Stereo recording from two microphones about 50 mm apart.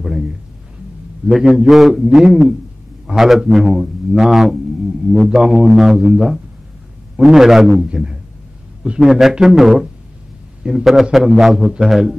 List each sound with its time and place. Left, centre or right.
0.0 s a sound: centre
1.4 s speech: centre
1.7 s a man's voice: centre
7.8 s a man's voice: centre
9.0 s a man's voice: centre